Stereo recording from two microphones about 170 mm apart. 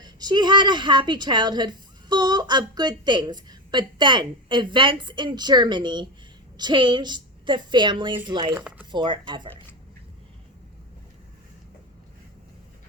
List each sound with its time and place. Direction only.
0.0 s a woman's voice: 25° right (ahead or behind)
8.5 s speech: 10° right (ahead or behind)
8.9 s a woman's voice: 25° right (ahead or behind)